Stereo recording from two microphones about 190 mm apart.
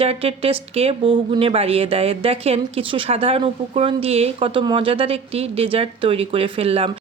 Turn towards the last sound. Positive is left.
turn(degrees=-30)  # may be behind; listen again after turning